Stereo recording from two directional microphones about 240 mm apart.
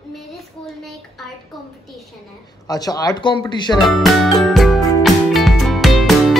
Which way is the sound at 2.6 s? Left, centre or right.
Centre.